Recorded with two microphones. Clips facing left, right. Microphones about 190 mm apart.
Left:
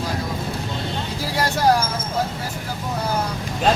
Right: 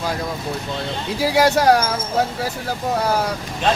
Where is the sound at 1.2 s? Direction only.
80° right.